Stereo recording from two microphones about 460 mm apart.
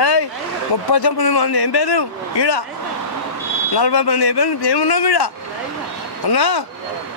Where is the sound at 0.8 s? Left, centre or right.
Left.